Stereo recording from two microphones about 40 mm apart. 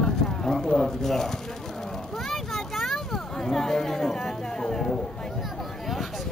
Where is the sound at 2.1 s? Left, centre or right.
Centre.